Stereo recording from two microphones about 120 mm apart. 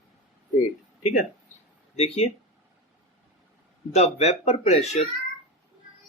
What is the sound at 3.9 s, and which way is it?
Speech, 65° left (ahead or behind).